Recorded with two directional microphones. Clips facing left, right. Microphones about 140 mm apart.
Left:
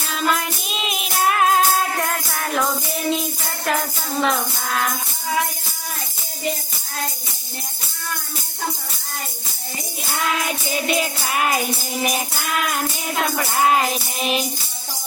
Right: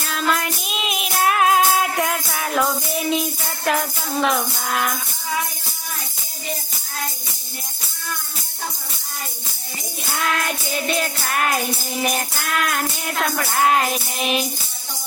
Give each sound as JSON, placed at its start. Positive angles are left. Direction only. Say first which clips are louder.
{"t": 0.0, "sound": "music", "louder": "even", "side_deg": 0}
{"t": 4.2, "sound": "music", "louder": "even", "side_deg": -5}
{"t": 10.2, "sound": "music", "louder": "even", "side_deg": 5}